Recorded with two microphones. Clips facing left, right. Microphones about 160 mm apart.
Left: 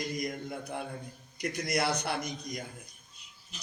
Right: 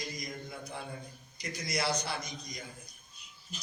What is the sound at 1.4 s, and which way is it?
A man's voice, 60° left (ahead or behind).